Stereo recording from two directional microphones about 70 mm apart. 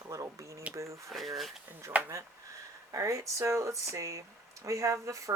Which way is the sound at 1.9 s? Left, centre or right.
Right.